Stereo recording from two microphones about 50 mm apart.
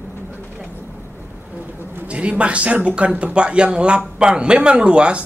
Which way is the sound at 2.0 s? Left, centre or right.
Right.